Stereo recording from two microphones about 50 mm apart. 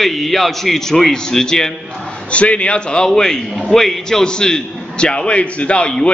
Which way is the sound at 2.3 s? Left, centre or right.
Left.